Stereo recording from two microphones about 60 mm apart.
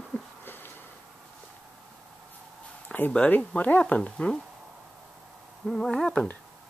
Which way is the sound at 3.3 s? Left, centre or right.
Left.